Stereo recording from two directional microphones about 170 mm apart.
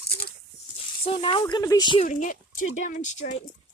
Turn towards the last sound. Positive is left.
turn(degrees=45)  # may be behind; listen again after turning